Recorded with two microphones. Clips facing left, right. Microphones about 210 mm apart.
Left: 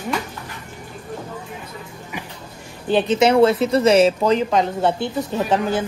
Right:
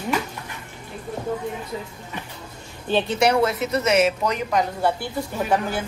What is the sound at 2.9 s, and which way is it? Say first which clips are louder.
A woman's voice: left 4 dB; 20° left (ahead or behind).